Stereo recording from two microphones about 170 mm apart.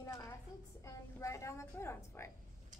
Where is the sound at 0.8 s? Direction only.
20° left (ahead or behind).